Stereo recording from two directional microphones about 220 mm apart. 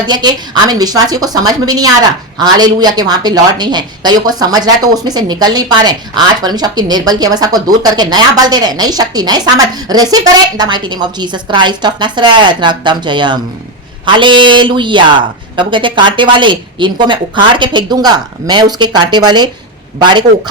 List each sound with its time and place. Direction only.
0.1 s a woman's voice: 20° right (ahead or behind)